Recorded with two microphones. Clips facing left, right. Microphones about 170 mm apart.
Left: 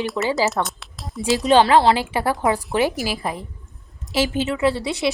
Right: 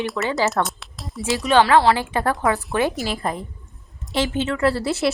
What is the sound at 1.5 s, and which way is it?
Speech, 20° left (ahead or behind).